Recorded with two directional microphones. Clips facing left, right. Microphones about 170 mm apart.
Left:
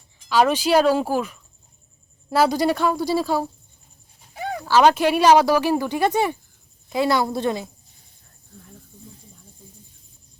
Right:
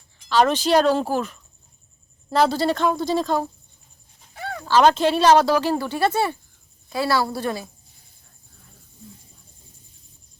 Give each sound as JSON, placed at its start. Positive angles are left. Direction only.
{"t": 0.3, "sound": "a woman's voice", "side_deg": 10}